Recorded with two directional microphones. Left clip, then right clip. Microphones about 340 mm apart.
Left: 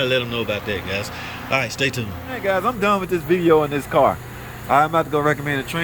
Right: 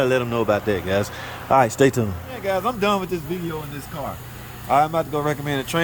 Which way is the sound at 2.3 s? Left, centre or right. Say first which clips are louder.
Left 3 dB; centre.